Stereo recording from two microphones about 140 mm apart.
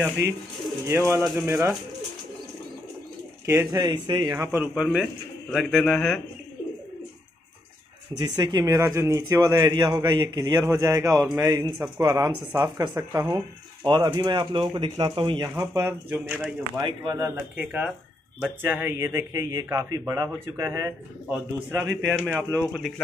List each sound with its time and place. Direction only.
0.8 s a man's voice: 20° right (ahead or behind)
3.4 s a man's voice: 20° right (ahead or behind)
3.8 s speech: 35° right (ahead or behind)
4.3 s a man's voice: 20° right (ahead or behind)
4.7 s speech: 5° right (ahead or behind)
8.2 s a man's voice: 30° right (ahead or behind)
13.8 s speech: 35° right (ahead or behind)
15.4 s speech: 20° right (ahead or behind)
16.8 s speech: 35° right (ahead or behind)
17.6 s a man's voice: 10° right (ahead or behind)
22.7 s speech: centre (ahead or behind)